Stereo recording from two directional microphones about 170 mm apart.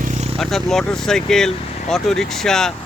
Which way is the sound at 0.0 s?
45° right (ahead or behind).